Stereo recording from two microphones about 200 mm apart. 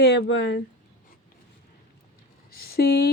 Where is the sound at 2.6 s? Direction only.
50° left (ahead or behind).